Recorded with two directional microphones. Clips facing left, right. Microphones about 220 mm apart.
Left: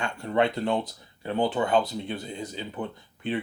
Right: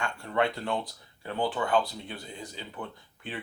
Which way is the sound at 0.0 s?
20° left (ahead or behind).